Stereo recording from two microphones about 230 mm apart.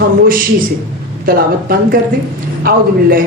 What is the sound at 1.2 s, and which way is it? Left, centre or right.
A man's voice, right.